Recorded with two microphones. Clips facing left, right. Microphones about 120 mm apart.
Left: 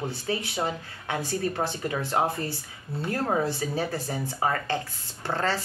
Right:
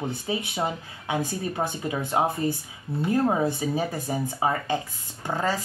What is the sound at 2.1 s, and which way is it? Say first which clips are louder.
Speech: right 4 dB; 15° right (ahead or behind).